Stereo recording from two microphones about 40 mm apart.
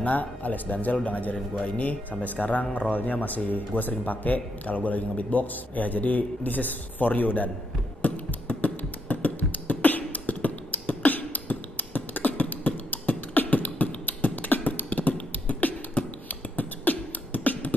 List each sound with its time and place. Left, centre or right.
0.0 s a man's voice: left
8.0 s beatboxing: left